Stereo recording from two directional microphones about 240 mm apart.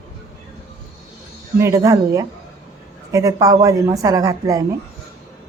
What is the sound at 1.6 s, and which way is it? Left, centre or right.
Speech, centre.